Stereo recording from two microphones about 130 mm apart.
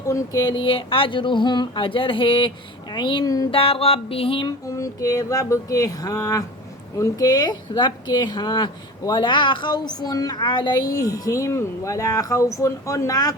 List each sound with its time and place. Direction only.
0.1 s speech: 30° left (ahead or behind)
3.5 s music: 45° left (ahead or behind)
4.4 s a woman's voice: 25° left (ahead or behind)